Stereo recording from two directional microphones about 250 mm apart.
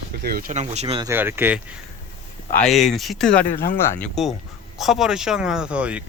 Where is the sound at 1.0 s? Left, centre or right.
Centre.